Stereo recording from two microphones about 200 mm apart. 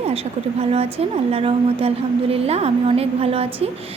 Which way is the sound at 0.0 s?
30° right (ahead or behind).